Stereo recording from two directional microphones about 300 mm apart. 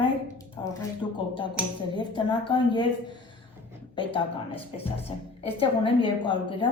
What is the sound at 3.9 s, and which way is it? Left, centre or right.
A woman's voice, centre.